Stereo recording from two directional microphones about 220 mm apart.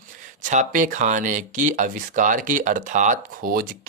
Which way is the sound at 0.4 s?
35° right (ahead or behind).